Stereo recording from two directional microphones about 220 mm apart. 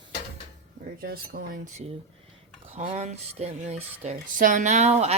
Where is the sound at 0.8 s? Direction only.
40° right (ahead or behind).